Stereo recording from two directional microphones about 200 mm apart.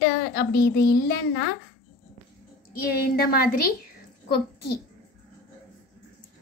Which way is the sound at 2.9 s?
50° left (ahead or behind).